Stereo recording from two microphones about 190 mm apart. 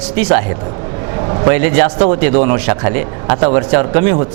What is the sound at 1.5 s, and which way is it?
Speech, 20° right (ahead or behind).